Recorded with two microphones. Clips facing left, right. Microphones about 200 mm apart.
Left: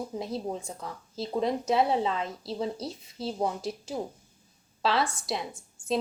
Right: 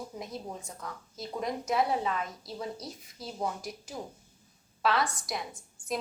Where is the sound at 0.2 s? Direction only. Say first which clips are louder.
Left 8 dB; 30° left (ahead or behind).